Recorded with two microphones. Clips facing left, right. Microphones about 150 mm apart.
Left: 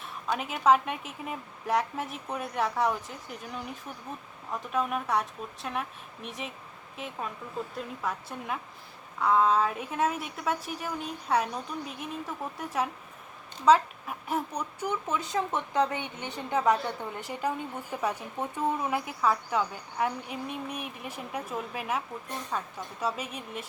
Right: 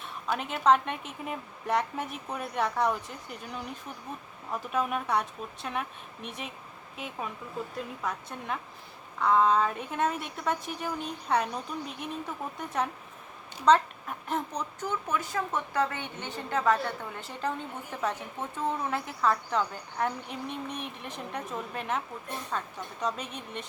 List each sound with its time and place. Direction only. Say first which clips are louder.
0.0 s a woman's voice: even; centre (ahead or behind)
15.0 s a woman's voice: left 1 dB; 20° left (ahead or behind); by 23.6 s 5° left (ahead or behind)